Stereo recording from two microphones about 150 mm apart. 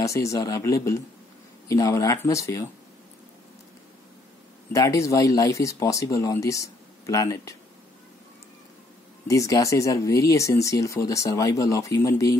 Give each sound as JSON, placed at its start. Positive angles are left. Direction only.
{"t": 0.0, "sound": "speech", "side_deg": 20}
{"t": 4.7, "sound": "speech", "side_deg": 20}
{"t": 9.3, "sound": "speech", "side_deg": 20}